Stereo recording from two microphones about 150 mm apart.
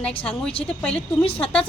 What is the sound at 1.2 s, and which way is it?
Speech, 40° left (ahead or behind).